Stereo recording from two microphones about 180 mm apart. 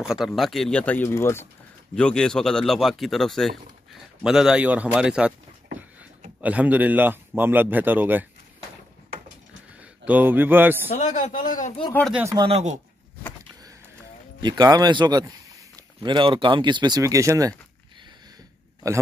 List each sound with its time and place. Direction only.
0.0 s speech: centre (ahead or behind)
6.4 s a man's voice: 10° right (ahead or behind)
9.8 s a man's voice: 10° right (ahead or behind)
10.9 s a man's voice: 40° left (ahead or behind)
12.1 s a man's voice: 10° right (ahead or behind)
12.4 s a man's voice: 35° right (ahead or behind)
14.4 s speech: 20° right (ahead or behind)